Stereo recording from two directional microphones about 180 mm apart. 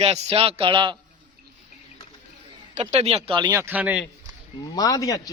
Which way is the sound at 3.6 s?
10° right (ahead or behind).